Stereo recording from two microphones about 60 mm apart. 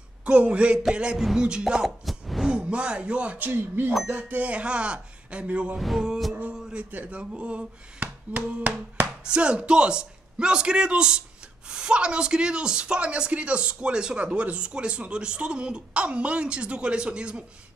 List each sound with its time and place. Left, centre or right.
0.2 s speech: right
1.1 s music: centre
1.4 s speech: centre
2.0 s a sound: centre
2.5 s speech: centre; by 3.9 s right
4.1 s speech: right
5.8 s music: centre
6.5 s a sound: centre
6.9 s speech: right